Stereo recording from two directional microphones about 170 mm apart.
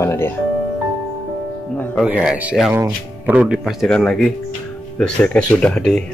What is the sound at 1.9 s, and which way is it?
Speech, 5° right (ahead or behind).